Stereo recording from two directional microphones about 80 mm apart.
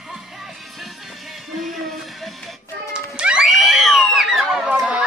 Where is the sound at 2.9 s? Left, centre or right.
Centre.